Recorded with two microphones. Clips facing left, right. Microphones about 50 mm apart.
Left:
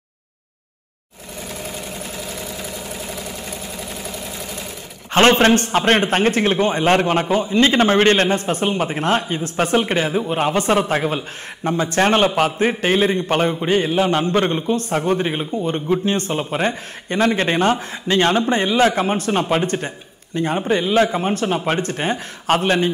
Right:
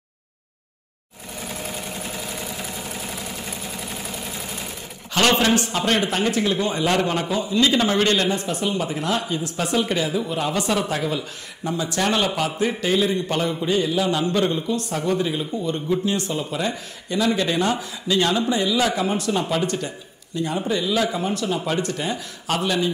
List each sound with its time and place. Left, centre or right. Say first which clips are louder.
1.6 s engine: left 1 dB; centre
5.1 s a man's voice: left 5 dB; left